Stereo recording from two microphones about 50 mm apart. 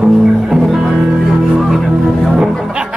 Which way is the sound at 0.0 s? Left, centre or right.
Centre.